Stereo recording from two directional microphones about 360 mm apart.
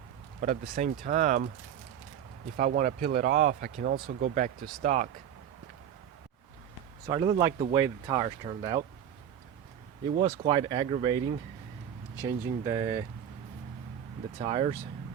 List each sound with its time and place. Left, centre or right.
0.7 s speech: right
2.6 s speech: right
7.1 s speech: centre
10.2 s speech: centre
14.3 s speech: centre